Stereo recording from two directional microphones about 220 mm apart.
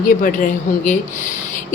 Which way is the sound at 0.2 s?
35° left (ahead or behind).